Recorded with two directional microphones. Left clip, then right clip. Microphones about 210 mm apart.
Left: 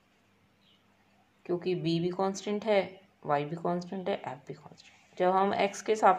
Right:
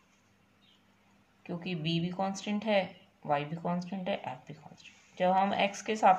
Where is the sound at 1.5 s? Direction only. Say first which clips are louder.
Left 6 dB; 30° left (ahead or behind).